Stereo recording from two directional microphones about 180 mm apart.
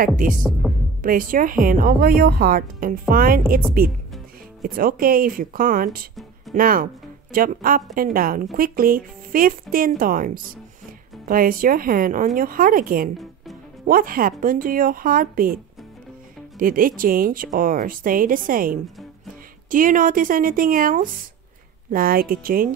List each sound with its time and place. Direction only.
0.0 s speech: 50° right (ahead or behind)
0.4 s speech: centre (ahead or behind)
1.0 s speech: 50° right (ahead or behind)
4.6 s speech: 55° right (ahead or behind)